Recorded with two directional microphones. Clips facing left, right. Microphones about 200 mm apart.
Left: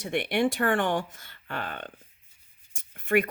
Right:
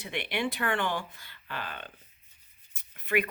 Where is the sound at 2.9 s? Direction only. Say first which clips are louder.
Left 5 dB; 45° left (ahead or behind).